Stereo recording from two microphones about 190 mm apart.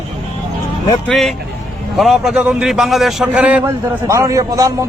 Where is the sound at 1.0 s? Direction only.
Centre (ahead or behind).